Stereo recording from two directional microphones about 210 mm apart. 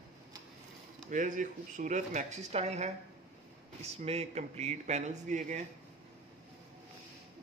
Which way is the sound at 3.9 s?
30° right (ahead or behind).